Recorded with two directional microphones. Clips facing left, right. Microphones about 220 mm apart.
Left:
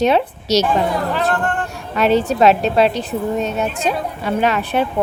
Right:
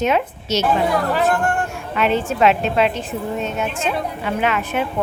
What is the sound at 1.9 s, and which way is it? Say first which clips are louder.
A woman's voice: left 4 dB; 40° left (ahead or behind).